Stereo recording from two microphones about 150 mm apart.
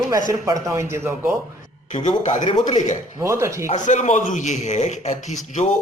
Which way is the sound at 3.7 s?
55° left (ahead or behind).